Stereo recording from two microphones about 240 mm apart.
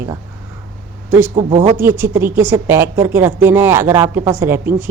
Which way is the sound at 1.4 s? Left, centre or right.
Right.